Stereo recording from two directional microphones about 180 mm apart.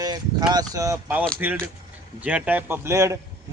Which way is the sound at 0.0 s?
20° right (ahead or behind).